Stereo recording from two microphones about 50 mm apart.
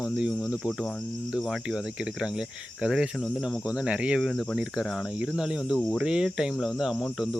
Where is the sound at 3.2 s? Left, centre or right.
Centre.